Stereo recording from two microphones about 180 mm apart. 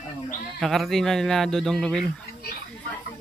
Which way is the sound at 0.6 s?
Centre (ahead or behind).